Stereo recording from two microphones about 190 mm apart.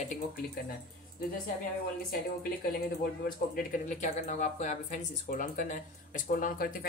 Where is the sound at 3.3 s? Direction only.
45° left (ahead or behind).